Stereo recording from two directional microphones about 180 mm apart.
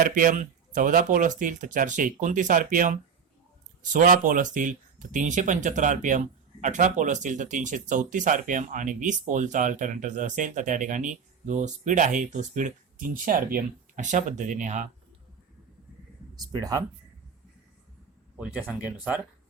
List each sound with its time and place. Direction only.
0.0 s speech: 50° right (ahead or behind)
16.3 s speech: 20° right (ahead or behind)
18.9 s speech: 5° right (ahead or behind)